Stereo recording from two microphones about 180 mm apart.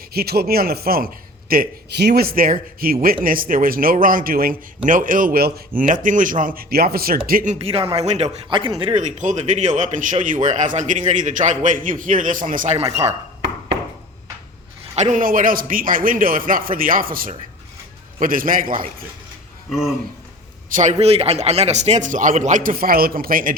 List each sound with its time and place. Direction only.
0.1 s a man's voice: 60° right (ahead or behind)
6.6 s a man's voice: 60° right (ahead or behind)
7.5 s a man's voice: 35° right (ahead or behind)
8.4 s speech: 25° right (ahead or behind)
9.1 s a man's voice: 40° right (ahead or behind)
14.9 s a man's voice: 40° right (ahead or behind)
20.7 s a man's voice: 40° right (ahead or behind)